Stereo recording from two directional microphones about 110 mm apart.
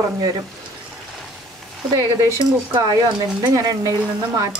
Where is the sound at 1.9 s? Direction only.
30° right (ahead or behind).